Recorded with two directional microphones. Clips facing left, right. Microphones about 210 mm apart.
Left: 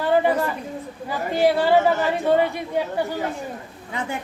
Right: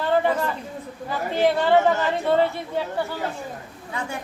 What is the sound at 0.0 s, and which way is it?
Chatter, 10° left (ahead or behind).